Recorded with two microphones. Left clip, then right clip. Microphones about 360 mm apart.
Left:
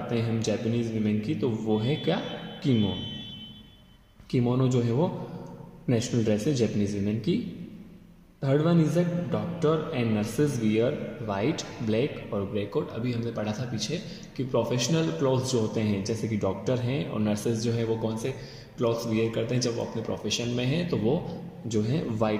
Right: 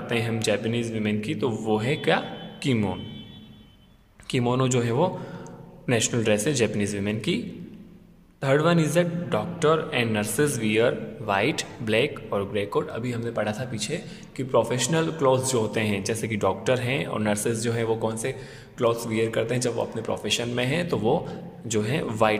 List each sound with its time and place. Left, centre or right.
0.0 s a man's voice: right
4.6 s a man's voice: right
8.6 s a man's voice: right
20.9 s a man's voice: right